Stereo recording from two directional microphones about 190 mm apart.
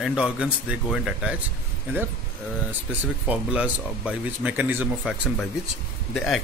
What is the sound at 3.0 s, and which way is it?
Speech, 10° right (ahead or behind).